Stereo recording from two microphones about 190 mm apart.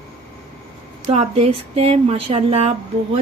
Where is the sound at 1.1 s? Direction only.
35° right (ahead or behind).